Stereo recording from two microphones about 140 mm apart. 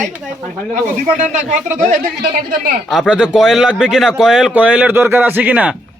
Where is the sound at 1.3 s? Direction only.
65° right (ahead or behind).